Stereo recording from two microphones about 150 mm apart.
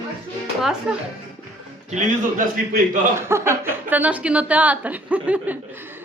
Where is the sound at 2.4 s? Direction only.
60° right (ahead or behind).